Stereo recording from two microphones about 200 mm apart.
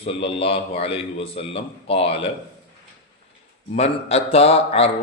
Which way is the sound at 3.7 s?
30° left (ahead or behind).